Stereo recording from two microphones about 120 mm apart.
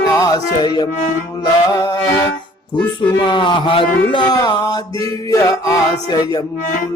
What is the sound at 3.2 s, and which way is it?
Music, 40° left (ahead or behind).